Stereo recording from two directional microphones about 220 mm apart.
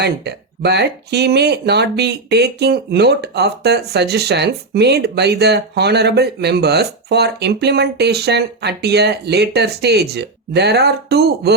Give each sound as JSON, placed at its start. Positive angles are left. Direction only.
{"t": 0.0, "sound": "speech", "side_deg": -50}